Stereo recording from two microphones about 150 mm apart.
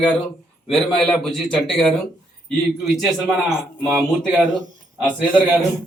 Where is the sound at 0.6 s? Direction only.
Centre (ahead or behind).